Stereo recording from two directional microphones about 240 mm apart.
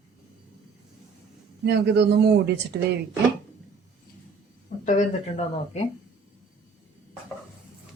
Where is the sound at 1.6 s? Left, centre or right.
Right.